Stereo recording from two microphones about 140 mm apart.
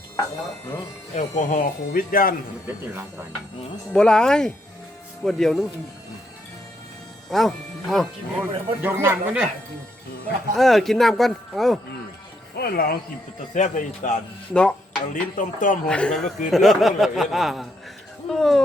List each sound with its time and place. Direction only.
1.1 s speech: 65° left (ahead or behind); by 2.3 s 90° left
2.6 s speech: 15° right (ahead or behind)
3.9 s speech: 5° left (ahead or behind)
7.3 s speech: centre (ahead or behind)
8.4 s speech: 15° right (ahead or behind)
10.5 s speech: centre (ahead or behind)
12.6 s speech: 90° left
13.5 s speech: 60° left (ahead or behind)
14.5 s speech: 5° left (ahead or behind)
15.1 s a sound: 65° left (ahead or behind)
15.9 s speech: 5° left (ahead or behind)